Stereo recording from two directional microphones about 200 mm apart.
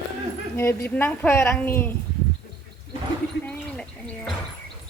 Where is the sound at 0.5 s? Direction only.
10° left (ahead or behind).